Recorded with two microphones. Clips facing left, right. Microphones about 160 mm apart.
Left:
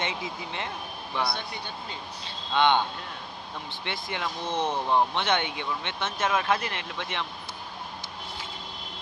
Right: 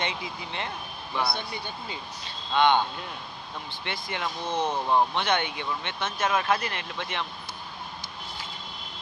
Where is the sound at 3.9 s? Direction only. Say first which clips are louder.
Even; 20° left (ahead or behind).